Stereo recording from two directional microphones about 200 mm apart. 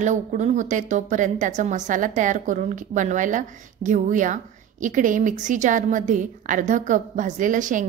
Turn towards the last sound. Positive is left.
turn(degrees=-40)  # may be behind; listen again after turning